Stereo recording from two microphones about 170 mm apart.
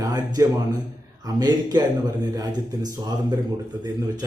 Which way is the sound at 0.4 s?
20° right (ahead or behind).